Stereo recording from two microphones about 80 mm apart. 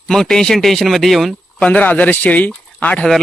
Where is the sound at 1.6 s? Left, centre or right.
Centre.